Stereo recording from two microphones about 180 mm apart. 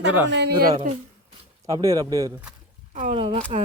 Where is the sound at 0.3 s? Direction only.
65° right (ahead or behind).